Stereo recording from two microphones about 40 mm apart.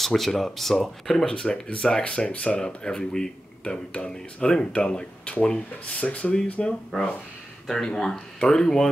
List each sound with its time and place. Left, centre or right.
0.0 s speech: centre; by 6.3 s left
6.6 s speech: left